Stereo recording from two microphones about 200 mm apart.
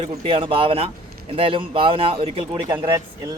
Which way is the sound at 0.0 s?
25° right (ahead or behind).